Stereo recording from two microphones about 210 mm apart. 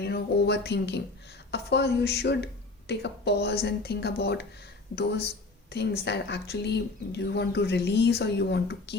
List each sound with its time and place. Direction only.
0.0 s speech: 55° left (ahead or behind)